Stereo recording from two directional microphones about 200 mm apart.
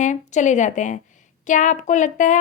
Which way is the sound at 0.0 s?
40° left (ahead or behind).